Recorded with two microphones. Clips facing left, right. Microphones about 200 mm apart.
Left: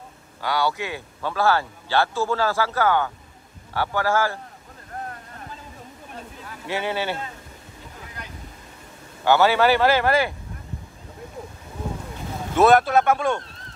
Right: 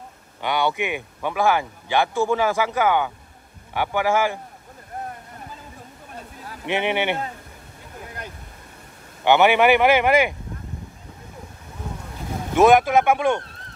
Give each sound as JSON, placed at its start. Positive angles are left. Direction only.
{"t": 0.4, "sound": "speech", "side_deg": -20}
{"t": 6.6, "sound": "speech", "side_deg": -20}
{"t": 9.2, "sound": "speech", "side_deg": -20}
{"t": 12.5, "sound": "speech", "side_deg": -15}